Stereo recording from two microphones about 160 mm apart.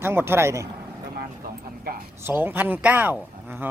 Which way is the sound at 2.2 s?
15° right (ahead or behind).